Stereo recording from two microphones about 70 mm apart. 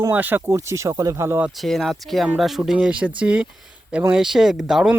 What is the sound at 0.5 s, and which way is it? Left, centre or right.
Speech, right.